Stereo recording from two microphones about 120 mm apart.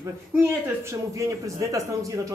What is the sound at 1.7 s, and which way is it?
Speech, 25° right (ahead or behind).